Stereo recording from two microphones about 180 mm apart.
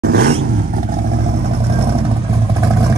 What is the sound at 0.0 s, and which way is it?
Roar, 60° right (ahead or behind).